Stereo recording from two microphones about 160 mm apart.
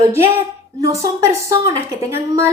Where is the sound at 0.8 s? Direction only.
20° right (ahead or behind).